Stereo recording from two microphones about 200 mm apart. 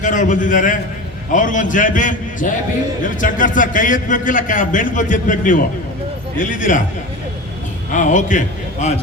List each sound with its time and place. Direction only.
0.0 s a man's voice: 40° left (ahead or behind)
7.9 s a man's voice: 40° left (ahead or behind)